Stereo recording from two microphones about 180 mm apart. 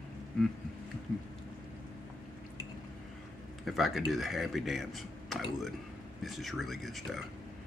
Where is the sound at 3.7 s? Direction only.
Centre (ahead or behind).